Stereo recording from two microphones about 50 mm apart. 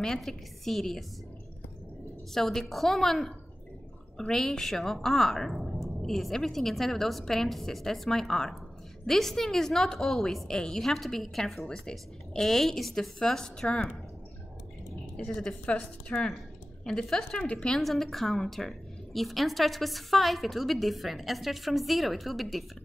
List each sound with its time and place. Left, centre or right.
0.0 s a woman's voice: centre
2.3 s a woman's voice: centre
15.2 s a woman's voice: centre
16.8 s a woman's voice: centre
17.4 s a woman's voice: left
17.7 s a woman's voice: centre